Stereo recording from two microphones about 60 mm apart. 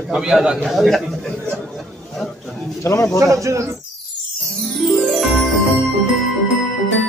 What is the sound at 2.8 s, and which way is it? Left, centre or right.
Speech, left.